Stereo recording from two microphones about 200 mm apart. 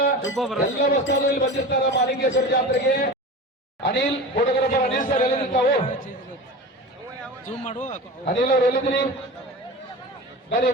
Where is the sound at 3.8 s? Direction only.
55° left (ahead or behind).